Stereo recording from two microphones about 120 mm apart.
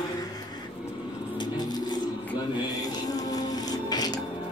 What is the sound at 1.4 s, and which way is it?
Vehicle, 35° left (ahead or behind).